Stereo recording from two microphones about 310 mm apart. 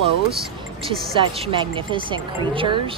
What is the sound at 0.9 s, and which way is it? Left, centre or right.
Speech, centre.